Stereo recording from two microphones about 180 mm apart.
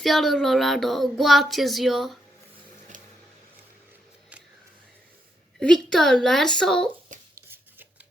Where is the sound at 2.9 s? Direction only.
45° right (ahead or behind).